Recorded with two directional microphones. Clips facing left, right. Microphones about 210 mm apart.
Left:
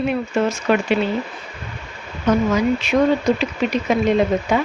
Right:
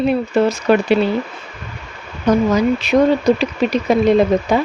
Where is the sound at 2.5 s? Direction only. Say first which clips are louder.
Right 3 dB; 35° right (ahead or behind).